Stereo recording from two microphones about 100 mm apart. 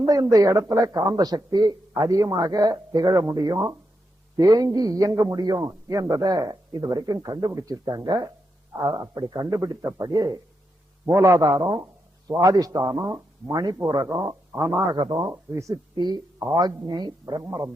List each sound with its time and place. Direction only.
0.0 s a man's voice: 40° right (ahead or behind)
14.5 s speech: 25° right (ahead or behind)
14.9 s speech: 50° right (ahead or behind)
15.3 s speech: 30° right (ahead or behind)
16.0 s speech: 45° right (ahead or behind)